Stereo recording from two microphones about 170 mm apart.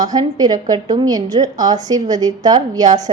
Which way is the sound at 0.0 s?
25° right (ahead or behind).